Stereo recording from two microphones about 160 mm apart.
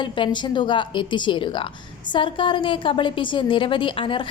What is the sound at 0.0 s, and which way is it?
A woman's voice, 30° left (ahead or behind).